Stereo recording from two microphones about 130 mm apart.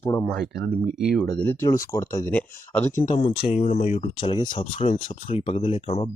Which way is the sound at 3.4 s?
70° left (ahead or behind).